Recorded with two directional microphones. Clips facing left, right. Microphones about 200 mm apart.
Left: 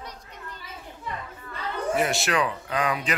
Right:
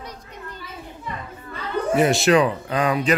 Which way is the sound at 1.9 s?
20° right (ahead or behind).